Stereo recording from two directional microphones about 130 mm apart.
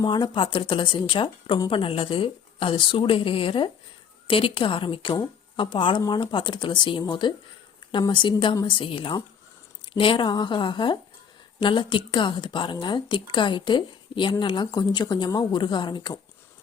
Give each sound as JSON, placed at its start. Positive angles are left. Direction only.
{"t": 0.0, "sound": "speech", "side_deg": 35}